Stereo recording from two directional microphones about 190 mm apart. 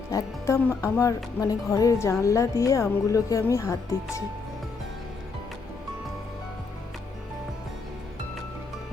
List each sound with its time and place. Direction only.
0.1 s music: 15° left (ahead or behind)